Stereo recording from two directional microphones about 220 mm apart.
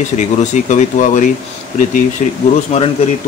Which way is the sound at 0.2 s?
30° left (ahead or behind).